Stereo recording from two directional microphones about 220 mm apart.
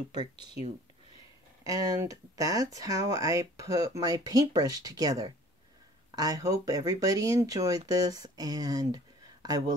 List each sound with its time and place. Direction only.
0.1 s speech: 20° right (ahead or behind)
1.6 s speech: 15° right (ahead or behind)